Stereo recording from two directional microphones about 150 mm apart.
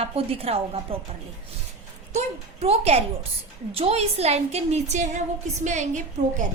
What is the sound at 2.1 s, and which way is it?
A woman's voice, 45° right (ahead or behind).